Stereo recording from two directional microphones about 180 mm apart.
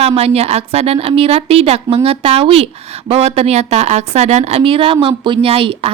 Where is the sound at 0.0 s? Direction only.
35° right (ahead or behind).